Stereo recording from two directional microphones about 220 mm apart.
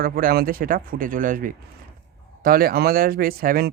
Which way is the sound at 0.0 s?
40° right (ahead or behind).